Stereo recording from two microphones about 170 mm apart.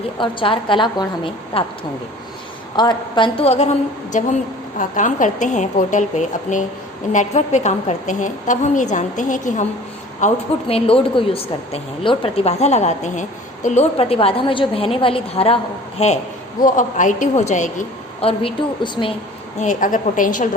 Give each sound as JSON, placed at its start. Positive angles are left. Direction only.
{"t": 0.2, "sound": "a woman's voice", "side_deg": 30}
{"t": 2.7, "sound": "a woman's voice", "side_deg": 25}
{"t": 16.6, "sound": "a woman's voice", "side_deg": 50}
{"t": 19.5, "sound": "a woman's voice", "side_deg": 50}